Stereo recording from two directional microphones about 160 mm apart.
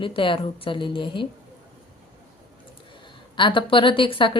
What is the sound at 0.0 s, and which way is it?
A woman's voice, 30° left (ahead or behind).